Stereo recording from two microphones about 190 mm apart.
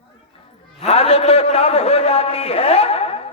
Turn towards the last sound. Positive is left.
turn(degrees=30)  # may be behind; listen again after turning